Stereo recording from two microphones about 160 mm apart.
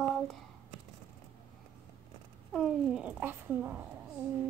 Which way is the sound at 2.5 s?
Centre (ahead or behind).